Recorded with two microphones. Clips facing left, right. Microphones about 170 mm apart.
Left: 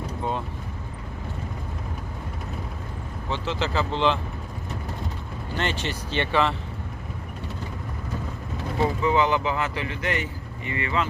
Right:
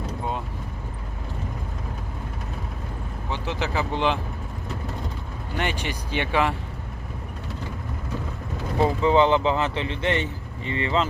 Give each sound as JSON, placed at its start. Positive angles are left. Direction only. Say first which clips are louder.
{"t": 3.3, "sound": "speech", "louder": "left 1 dB", "side_deg": -15}
{"t": 5.5, "sound": "speech", "louder": "even", "side_deg": -10}
{"t": 9.0, "sound": "speech", "louder": "right 5 dB", "side_deg": -25}